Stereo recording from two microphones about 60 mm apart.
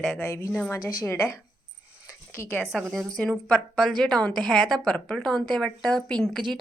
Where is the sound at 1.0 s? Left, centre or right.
Left.